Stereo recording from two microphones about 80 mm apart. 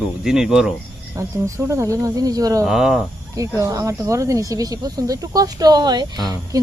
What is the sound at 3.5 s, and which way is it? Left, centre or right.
Speech, right.